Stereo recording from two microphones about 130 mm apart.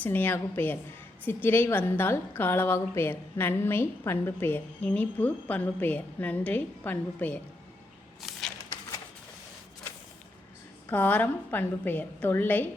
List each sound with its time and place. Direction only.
0.0 s a woman's voice: 15° left (ahead or behind)
8.3 s a sound: centre (ahead or behind)
10.8 s a woman's voice: 15° left (ahead or behind)